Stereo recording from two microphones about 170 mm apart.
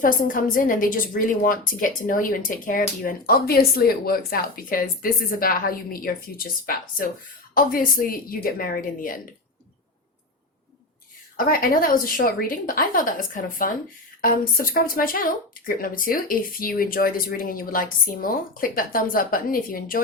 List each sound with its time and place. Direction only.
0.0 s a woman's voice: 55° left (ahead or behind)
11.3 s speech: 55° left (ahead or behind)